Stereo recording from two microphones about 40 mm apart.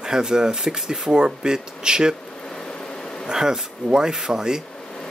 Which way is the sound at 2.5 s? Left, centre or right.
Centre.